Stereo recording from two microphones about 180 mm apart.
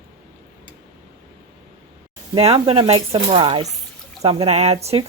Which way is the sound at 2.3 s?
30° right (ahead or behind).